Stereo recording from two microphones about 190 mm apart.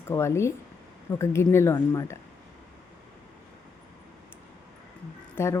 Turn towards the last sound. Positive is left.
turn(degrees=10)  # may be behind; listen again after turning